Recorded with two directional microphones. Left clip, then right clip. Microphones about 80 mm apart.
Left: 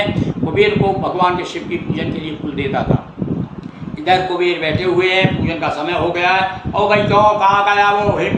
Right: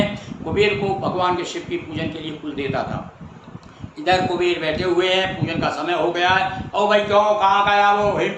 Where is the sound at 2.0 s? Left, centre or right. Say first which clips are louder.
Left 5 dB; centre.